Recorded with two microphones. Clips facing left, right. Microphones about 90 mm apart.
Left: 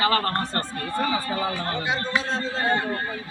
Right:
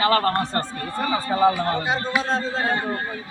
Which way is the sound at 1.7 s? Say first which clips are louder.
Right 3 dB; 40° right (ahead or behind).